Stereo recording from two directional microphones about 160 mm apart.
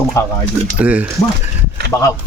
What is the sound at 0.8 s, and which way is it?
Speech, 10° right (ahead or behind).